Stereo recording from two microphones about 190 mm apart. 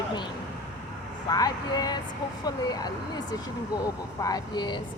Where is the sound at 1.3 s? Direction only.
20° left (ahead or behind).